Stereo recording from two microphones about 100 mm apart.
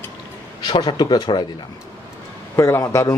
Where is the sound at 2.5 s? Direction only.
35° left (ahead or behind).